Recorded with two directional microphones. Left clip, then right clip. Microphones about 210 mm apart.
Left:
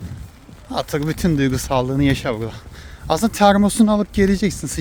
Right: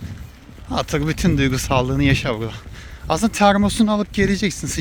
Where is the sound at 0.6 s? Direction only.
20° left (ahead or behind).